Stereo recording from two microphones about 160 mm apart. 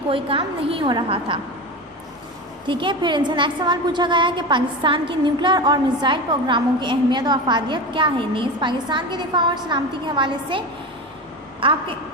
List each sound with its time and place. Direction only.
0.1 s a woman's voice: 35° right (ahead or behind)
2.6 s a woman's voice: 30° right (ahead or behind)
11.6 s a woman's voice: 30° right (ahead or behind)